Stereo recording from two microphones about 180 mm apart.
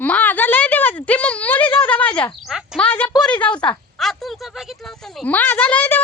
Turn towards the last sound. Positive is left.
turn(degrees=10)  # may be behind; listen again after turning